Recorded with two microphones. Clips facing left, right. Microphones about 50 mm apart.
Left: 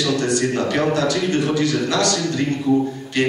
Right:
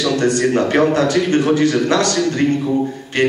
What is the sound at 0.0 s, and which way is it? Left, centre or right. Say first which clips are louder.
A man's voice: right 4 dB; right.